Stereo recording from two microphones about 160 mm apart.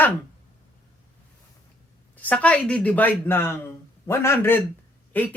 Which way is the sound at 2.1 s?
10° left (ahead or behind).